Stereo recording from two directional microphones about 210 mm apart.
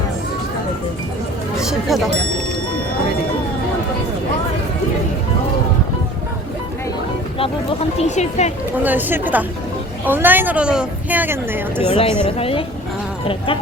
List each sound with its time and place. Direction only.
1.6 s speech: centre (ahead or behind)
7.9 s speech: 35° left (ahead or behind)
8.8 s a woman's voice: 10° right (ahead or behind)
11.9 s speech: 25° left (ahead or behind)